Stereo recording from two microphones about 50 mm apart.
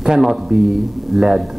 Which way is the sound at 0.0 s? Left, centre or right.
Centre.